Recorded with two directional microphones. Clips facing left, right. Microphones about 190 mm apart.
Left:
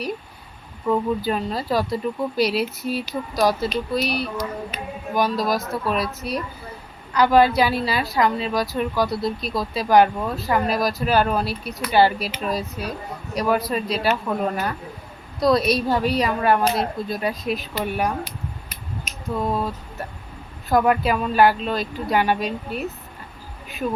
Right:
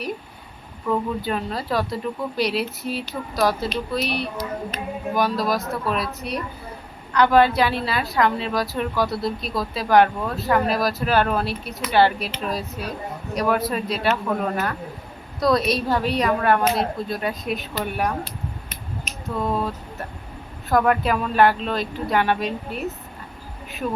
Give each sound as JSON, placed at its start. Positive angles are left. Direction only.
{"t": 1.2, "sound": "a woman's voice", "side_deg": 0}
{"t": 19.5, "sound": "a woman's voice", "side_deg": 5}